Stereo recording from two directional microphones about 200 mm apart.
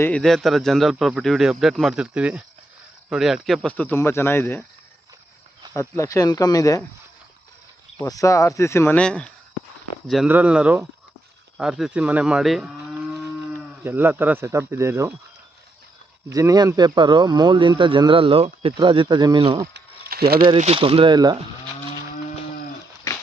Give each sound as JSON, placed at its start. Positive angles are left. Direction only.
{"t": 0.0, "sound": "speech", "side_deg": 5}
{"t": 5.7, "sound": "speech", "side_deg": 15}
{"t": 8.0, "sound": "speech", "side_deg": 15}
{"t": 10.1, "sound": "speech", "side_deg": -5}
{"t": 11.5, "sound": "moo", "side_deg": 0}
{"t": 14.7, "sound": "speech", "side_deg": -15}
{"t": 16.3, "sound": "speech", "side_deg": -15}
{"t": 19.7, "sound": "a sound", "side_deg": -50}
{"t": 20.5, "sound": "speech", "side_deg": -30}